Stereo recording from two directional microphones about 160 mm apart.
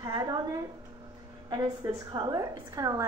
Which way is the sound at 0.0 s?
25° right (ahead or behind).